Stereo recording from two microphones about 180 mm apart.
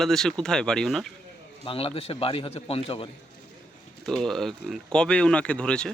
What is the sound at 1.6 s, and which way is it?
A man's voice, 30° left (ahead or behind).